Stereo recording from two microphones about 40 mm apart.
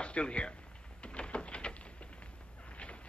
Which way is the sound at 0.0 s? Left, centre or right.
Left.